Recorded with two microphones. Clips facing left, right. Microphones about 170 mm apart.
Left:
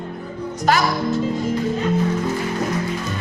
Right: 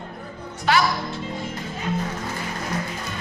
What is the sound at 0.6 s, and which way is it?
Speech, 40° left (ahead or behind).